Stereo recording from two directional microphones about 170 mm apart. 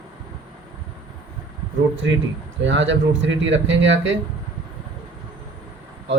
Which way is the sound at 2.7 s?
90° right.